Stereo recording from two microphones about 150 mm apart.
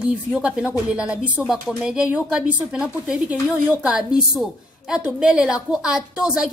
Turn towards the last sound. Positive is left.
turn(degrees=-5)  # may be behind; listen again after turning